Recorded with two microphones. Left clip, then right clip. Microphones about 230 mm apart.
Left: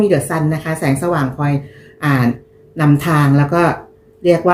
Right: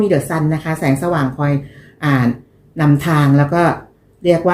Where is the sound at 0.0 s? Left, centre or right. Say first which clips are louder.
Left 1 dB; centre.